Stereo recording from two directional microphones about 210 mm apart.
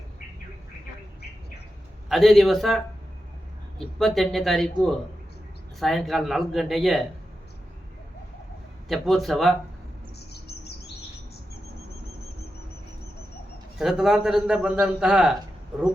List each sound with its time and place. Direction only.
2.0 s a man's voice: centre (ahead or behind)
8.9 s a man's voice: centre (ahead or behind)
10.2 s chirp: 50° left (ahead or behind)
13.7 s a man's voice: centre (ahead or behind)